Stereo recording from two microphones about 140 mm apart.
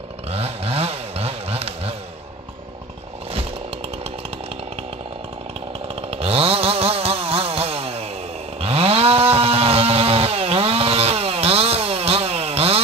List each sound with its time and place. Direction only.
0.3 s chainsaw: 45° right (ahead or behind)
5.9 s chainsaw: 45° right (ahead or behind)